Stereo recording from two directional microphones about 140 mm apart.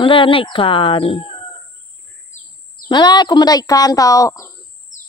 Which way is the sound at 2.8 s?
30° left (ahead or behind).